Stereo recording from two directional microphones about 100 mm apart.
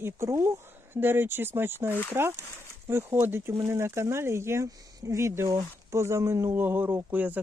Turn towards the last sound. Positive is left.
turn(degrees=-15)  # may be behind; listen again after turning